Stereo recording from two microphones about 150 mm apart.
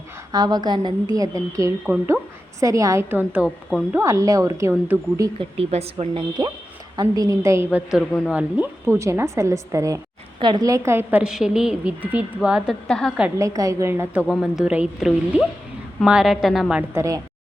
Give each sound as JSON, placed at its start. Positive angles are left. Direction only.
{"t": 0.3, "sound": "a woman's voice", "side_deg": -25}
{"t": 1.9, "sound": "a woman's voice", "side_deg": -10}
{"t": 2.6, "sound": "a woman's voice", "side_deg": -20}
{"t": 5.4, "sound": "speech", "side_deg": -40}
{"t": 6.9, "sound": "a woman's voice", "side_deg": -25}
{"t": 13.4, "sound": "a woman's voice", "side_deg": -20}
{"t": 16.9, "sound": "a woman's voice", "side_deg": -20}